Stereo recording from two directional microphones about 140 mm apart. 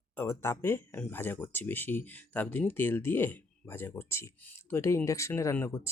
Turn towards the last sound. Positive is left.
turn(degrees=20)  # may be behind; listen again after turning